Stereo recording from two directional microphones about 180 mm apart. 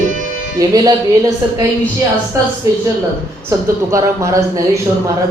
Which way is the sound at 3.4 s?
15° right (ahead or behind).